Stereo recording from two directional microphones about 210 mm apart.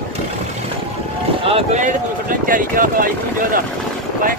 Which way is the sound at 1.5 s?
30° right (ahead or behind).